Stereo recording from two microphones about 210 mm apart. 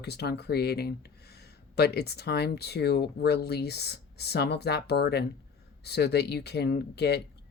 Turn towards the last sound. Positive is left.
turn(degrees=50)  # may be behind; listen again after turning